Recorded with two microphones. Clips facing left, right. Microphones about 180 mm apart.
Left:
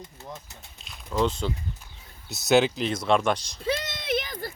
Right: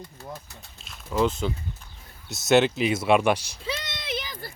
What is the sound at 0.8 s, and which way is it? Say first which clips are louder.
Speech: right 1 dB; centre (ahead or behind).